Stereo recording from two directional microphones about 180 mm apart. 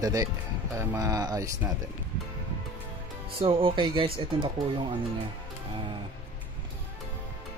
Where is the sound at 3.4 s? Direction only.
30° right (ahead or behind).